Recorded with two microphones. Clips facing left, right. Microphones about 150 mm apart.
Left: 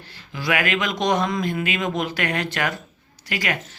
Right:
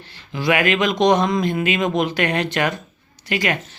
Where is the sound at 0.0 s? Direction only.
25° right (ahead or behind).